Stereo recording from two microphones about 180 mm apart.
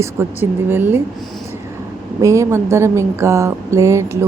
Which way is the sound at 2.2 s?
15° right (ahead or behind).